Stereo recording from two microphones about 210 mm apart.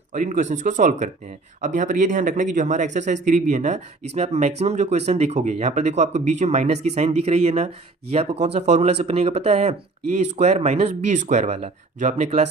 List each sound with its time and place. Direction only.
0.1 s speech: 35° right (ahead or behind)